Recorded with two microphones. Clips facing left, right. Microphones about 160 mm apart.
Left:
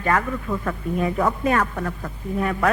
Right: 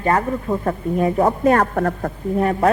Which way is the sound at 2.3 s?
40° right (ahead or behind).